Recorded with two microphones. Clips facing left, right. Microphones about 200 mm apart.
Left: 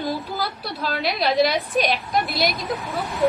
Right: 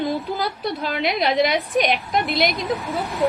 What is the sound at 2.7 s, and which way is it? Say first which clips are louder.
Speech: right 1 dB; centre (ahead or behind).